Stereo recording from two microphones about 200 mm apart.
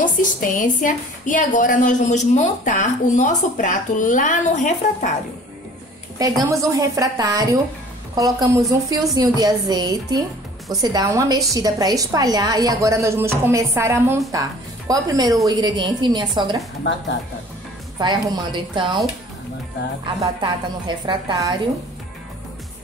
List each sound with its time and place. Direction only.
0.0 s a woman's voice: 40° left (ahead or behind)
6.5 s a woman's voice: 15° right (ahead or behind)
17.9 s a woman's voice: 20° right (ahead or behind)
20.3 s a woman's voice: 20° right (ahead or behind)